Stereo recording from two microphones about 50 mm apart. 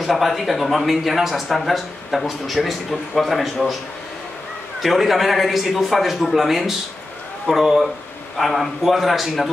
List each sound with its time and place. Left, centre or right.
0.0 s speech: centre
4.8 s speech: centre